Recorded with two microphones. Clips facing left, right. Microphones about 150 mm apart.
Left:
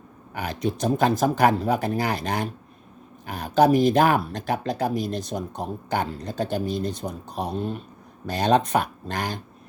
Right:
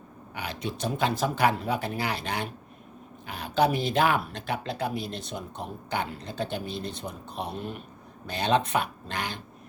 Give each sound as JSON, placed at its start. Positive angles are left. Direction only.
{"t": 0.3, "sound": "speech", "side_deg": 45}